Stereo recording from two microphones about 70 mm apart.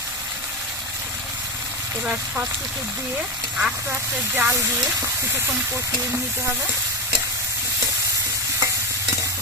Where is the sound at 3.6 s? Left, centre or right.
Centre.